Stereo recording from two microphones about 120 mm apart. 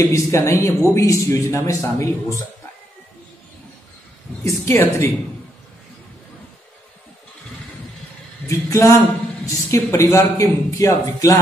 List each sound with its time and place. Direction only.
0.1 s a man's voice: 25° left (ahead or behind)
4.5 s a man's voice: 25° left (ahead or behind)
8.5 s a man's voice: 25° left (ahead or behind)